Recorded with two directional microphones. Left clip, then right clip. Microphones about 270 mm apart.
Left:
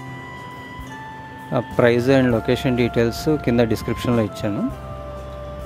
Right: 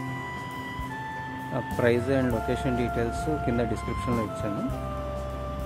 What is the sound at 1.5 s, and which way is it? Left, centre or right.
Speech, left.